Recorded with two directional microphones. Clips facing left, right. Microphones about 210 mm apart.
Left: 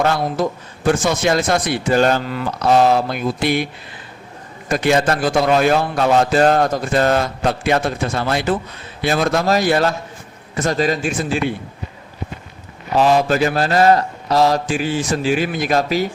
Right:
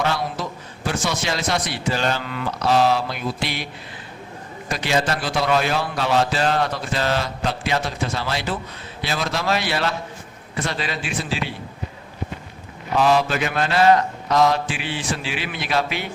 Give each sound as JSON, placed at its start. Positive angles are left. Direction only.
{"t": 0.0, "sound": "a man's voice", "side_deg": 50}
{"t": 4.7, "sound": "a man's voice", "side_deg": 50}
{"t": 13.0, "sound": "mantra", "side_deg": 45}